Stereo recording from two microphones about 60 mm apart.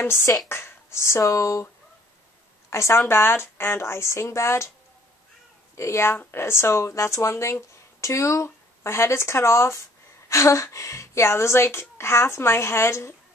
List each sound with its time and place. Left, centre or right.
0.0 s speech: left
0.5 s a sound: left
1.2 s speech: left
2.7 s a woman's voice: left
5.8 s speech: left